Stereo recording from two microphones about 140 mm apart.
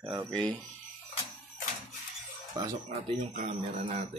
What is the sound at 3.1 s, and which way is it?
Speech, 60° right (ahead or behind).